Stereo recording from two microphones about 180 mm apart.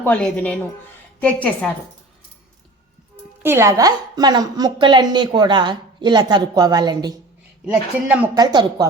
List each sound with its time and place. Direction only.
0.0 s a woman's voice: 10° left (ahead or behind)
3.4 s a woman's voice: 15° right (ahead or behind)
7.6 s speech: 5° right (ahead or behind)
8.4 s a woman's voice: 20° right (ahead or behind)